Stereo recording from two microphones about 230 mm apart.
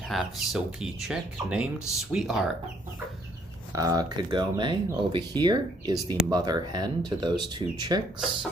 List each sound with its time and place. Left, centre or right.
0.1 s speech: centre
3.7 s speech: centre